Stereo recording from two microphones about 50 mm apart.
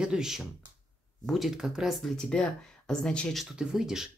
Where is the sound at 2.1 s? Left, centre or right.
Centre.